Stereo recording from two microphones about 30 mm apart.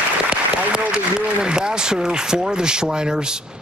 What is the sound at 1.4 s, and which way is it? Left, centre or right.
Speech, right.